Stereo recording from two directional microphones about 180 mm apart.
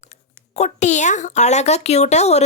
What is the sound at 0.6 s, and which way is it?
A woman's voice, 40° left (ahead or behind).